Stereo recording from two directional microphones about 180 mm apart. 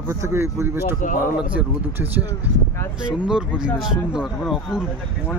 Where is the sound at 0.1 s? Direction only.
15° right (ahead or behind).